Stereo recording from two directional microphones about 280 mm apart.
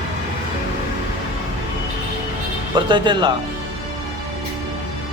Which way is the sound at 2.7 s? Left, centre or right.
Centre.